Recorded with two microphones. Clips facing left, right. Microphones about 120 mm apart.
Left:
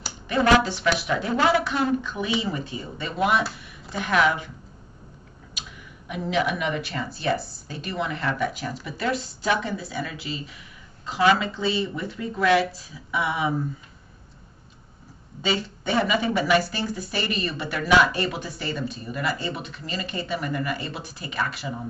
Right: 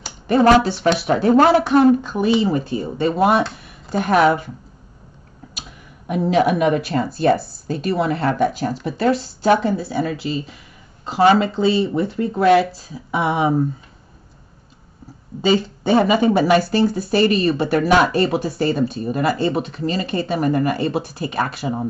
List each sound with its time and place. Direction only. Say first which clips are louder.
0.3 s speech: right 6 dB; 35° right (ahead or behind)
1.0 s speech: right 11 dB; 45° right (ahead or behind)
6.0 s speech: right 8 dB; 45° right (ahead or behind)
10.0 s speech: right 10 dB; 45° right (ahead or behind)
15.4 s speech: right 9 dB; 35° right (ahead or behind)